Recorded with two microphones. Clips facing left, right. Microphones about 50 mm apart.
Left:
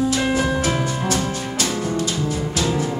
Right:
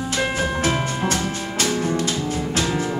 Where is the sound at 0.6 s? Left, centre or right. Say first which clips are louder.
Even; right.